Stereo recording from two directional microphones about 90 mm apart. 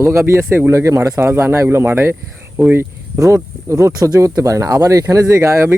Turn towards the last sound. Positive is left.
turn(degrees=-30)  # may be behind; listen again after turning